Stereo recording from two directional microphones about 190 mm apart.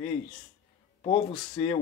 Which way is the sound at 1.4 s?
25° left (ahead or behind).